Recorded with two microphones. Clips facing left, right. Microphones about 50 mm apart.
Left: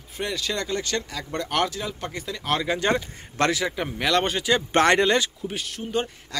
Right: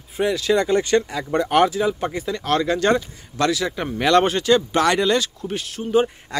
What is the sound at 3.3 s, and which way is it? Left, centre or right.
Speech, left.